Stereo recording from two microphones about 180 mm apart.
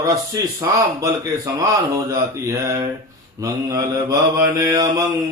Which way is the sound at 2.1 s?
20° right (ahead or behind).